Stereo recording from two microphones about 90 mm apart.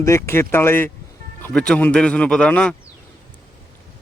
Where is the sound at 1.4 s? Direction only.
10° left (ahead or behind).